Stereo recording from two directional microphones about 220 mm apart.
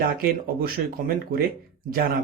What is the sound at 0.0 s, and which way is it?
A man's voice, 40° right (ahead or behind).